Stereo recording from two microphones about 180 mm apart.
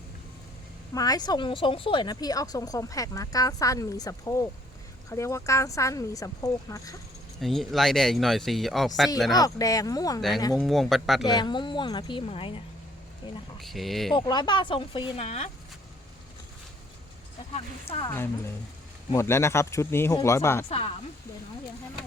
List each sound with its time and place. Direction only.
0.9 s speech: 20° left (ahead or behind)
7.4 s speech: centre (ahead or behind)
9.3 s speech: 20° left (ahead or behind)
10.2 s speech: centre (ahead or behind)
11.3 s speech: 25° left (ahead or behind)
13.6 s speech: centre (ahead or behind)
14.2 s speech: 25° left (ahead or behind)
17.5 s speech: 35° left (ahead or behind)
18.1 s speech: 15° left (ahead or behind)
20.7 s speech: 35° left (ahead or behind)